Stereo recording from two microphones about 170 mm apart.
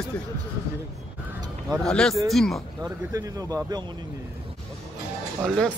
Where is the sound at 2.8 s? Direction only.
20° right (ahead or behind).